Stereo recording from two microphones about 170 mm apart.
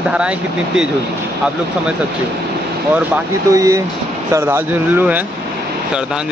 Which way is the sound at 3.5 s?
20° right (ahead or behind).